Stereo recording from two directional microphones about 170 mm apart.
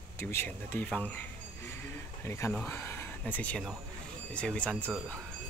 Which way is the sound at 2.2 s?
15° left (ahead or behind).